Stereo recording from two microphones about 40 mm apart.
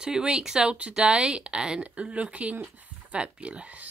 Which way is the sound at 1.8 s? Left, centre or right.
Right.